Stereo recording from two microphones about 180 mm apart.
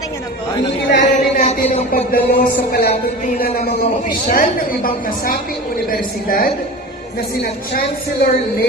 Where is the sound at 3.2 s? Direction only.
50° left (ahead or behind).